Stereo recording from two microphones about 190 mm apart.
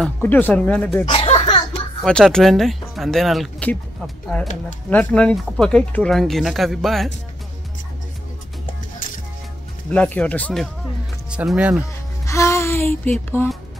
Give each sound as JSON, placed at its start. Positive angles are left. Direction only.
{"t": 0.0, "sound": "speech", "side_deg": 10}
{"t": 1.0, "sound": "a sound", "side_deg": 30}
{"t": 2.0, "sound": "speech", "side_deg": 5}
{"t": 9.9, "sound": "speech", "side_deg": 10}
{"t": 11.2, "sound": "speech", "side_deg": -5}
{"t": 12.3, "sound": "a sound", "side_deg": 15}
{"t": 13.4, "sound": "speech", "side_deg": 15}